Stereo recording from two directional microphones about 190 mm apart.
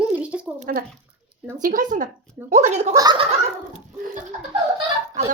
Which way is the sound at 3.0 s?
20° right (ahead or behind).